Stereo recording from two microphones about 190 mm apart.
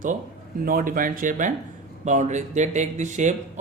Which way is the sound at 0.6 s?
50° right (ahead or behind).